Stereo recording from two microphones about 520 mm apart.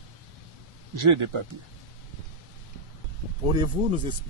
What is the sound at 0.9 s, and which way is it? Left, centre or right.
Speech, right.